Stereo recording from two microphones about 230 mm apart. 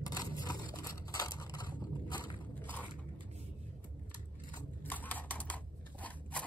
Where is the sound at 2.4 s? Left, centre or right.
Centre.